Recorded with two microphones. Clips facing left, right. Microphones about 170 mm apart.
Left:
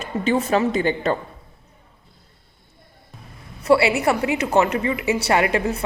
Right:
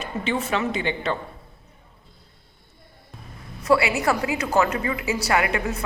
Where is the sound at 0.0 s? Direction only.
40° left (ahead or behind).